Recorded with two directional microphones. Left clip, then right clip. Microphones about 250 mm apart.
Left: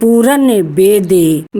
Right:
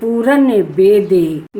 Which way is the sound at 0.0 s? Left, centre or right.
Left.